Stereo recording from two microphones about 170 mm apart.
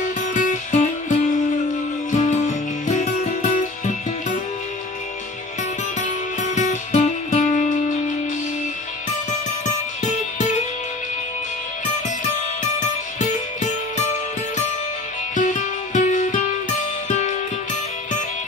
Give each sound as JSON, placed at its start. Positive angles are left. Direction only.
{"t": 0.3, "sound": "music", "side_deg": 45}
{"t": 2.1, "sound": "music", "side_deg": 45}
{"t": 5.9, "sound": "music", "side_deg": 45}
{"t": 12.7, "sound": "music", "side_deg": 45}
{"t": 15.3, "sound": "music", "side_deg": 45}